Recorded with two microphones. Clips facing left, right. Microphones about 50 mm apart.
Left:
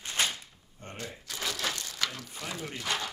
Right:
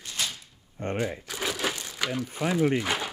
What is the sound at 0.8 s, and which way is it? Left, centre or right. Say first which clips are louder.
Speech: right 14 dB; right.